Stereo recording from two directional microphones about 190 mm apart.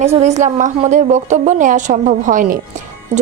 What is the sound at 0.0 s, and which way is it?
A woman's voice, 35° right (ahead or behind).